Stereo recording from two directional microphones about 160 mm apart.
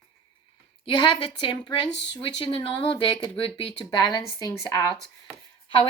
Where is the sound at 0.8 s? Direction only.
30° left (ahead or behind).